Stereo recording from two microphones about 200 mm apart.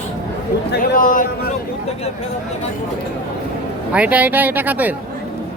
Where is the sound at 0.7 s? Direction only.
45° left (ahead or behind).